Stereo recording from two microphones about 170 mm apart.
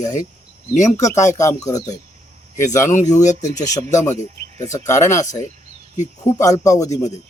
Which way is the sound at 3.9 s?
15° left (ahead or behind).